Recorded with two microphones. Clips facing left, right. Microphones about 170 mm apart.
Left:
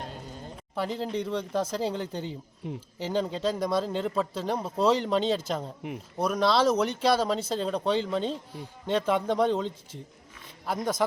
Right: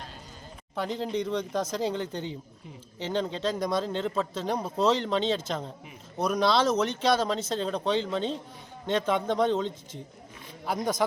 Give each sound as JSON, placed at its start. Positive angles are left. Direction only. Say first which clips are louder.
{"t": 0.8, "sound": "speech", "louder": "even", "side_deg": 5}
{"t": 2.6, "sound": "speech", "louder": "left 10 dB", "side_deg": 70}
{"t": 3.0, "sound": "speech", "louder": "left 1 dB", "side_deg": 10}